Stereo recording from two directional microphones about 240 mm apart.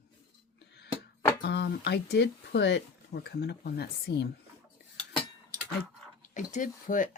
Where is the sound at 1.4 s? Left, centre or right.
Left.